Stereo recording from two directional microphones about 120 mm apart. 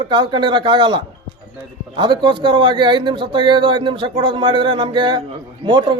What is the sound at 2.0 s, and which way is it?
A man's voice, 40° right (ahead or behind).